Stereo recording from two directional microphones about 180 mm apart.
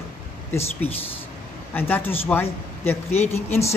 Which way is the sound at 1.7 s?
10° left (ahead or behind).